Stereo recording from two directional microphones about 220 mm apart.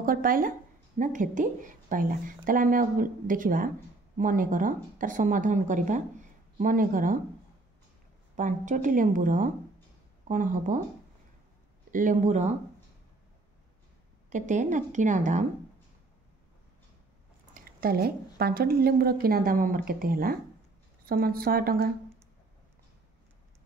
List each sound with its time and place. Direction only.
0.0 s a woman's voice: 40° right (ahead or behind)
8.4 s a woman's voice: 35° right (ahead or behind)
11.9 s a woman's voice: 35° right (ahead or behind)
14.3 s a woman's voice: 35° right (ahead or behind)
17.6 s a woman's voice: 40° right (ahead or behind)